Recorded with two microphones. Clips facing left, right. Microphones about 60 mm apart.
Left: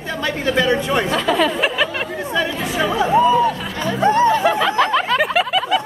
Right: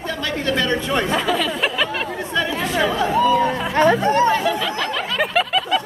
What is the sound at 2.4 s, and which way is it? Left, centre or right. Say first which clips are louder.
Chatter: even; centre.